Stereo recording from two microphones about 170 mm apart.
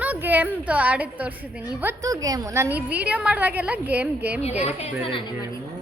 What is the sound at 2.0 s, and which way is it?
A woman's voice, 20° right (ahead or behind).